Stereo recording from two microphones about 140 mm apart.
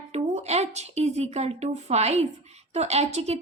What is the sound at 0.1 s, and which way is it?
A woman's voice, 50° right (ahead or behind).